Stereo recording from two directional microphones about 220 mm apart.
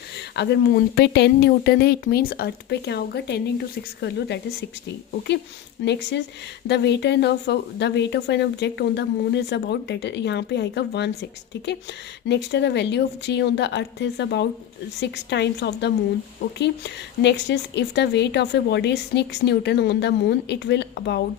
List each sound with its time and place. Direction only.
0.2 s a woman's voice: 50° left (ahead or behind)
5.8 s a woman's voice: 50° left (ahead or behind)